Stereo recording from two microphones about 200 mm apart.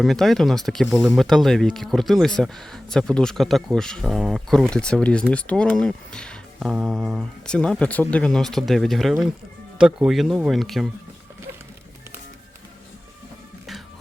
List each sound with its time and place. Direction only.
0.0 s speech: centre (ahead or behind)